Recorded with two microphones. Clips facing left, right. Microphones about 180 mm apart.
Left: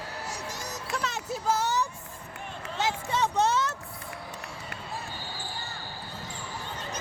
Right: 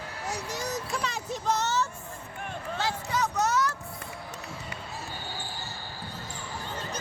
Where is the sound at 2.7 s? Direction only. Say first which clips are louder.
Left 2 dB; 25° left (ahead or behind).